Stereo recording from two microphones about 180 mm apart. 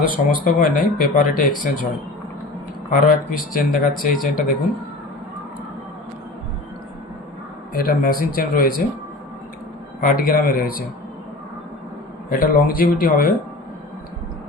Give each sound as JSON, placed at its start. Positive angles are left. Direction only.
{"t": 0.4, "sound": "speech", "side_deg": 50}
{"t": 2.9, "sound": "speech", "side_deg": 50}
{"t": 7.7, "sound": "speech", "side_deg": 55}
{"t": 10.0, "sound": "speech", "side_deg": 50}
{"t": 12.3, "sound": "speech", "side_deg": 50}